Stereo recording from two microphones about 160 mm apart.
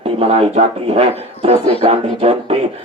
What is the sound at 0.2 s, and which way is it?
Speech, 40° right (ahead or behind).